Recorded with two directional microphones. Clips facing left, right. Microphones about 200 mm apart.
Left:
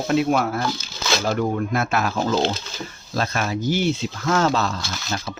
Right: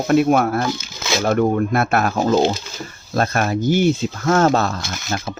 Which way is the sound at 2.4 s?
10° right (ahead or behind).